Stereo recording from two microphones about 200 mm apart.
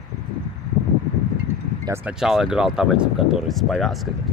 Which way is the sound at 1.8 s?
10° right (ahead or behind).